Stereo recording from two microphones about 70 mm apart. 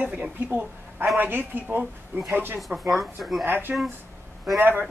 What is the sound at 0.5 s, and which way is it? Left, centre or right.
A woman's voice, right.